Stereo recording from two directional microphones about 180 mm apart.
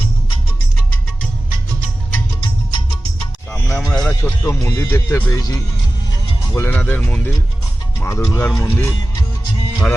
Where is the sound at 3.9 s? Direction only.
5° left (ahead or behind).